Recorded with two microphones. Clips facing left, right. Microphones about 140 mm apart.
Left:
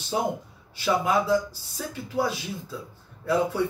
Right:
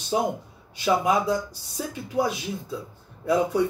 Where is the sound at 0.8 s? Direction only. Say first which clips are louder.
Right 2 dB; 15° right (ahead or behind).